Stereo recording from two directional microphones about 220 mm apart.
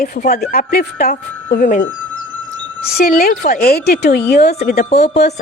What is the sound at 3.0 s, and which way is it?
A woman's voice, 40° left (ahead or behind).